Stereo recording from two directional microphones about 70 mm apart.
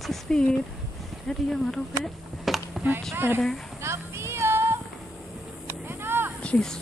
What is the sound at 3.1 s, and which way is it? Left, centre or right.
Speech, right.